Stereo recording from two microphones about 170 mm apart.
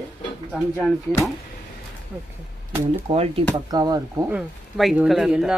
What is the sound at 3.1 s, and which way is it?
Speech, 30° right (ahead or behind).